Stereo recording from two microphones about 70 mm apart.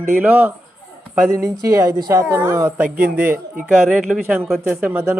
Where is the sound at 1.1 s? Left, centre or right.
Right.